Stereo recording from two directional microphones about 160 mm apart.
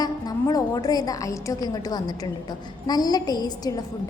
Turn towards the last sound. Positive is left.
turn(degrees=25)  # may be behind; listen again after turning